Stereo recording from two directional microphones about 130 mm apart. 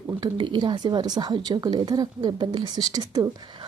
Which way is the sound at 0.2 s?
40° right (ahead or behind).